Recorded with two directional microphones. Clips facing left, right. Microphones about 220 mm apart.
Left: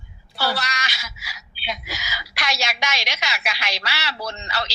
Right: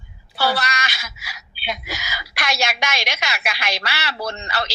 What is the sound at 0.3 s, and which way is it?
A woman's voice, 55° right (ahead or behind).